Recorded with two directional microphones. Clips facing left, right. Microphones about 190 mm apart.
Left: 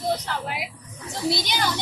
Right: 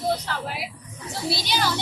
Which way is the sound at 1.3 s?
15° left (ahead or behind).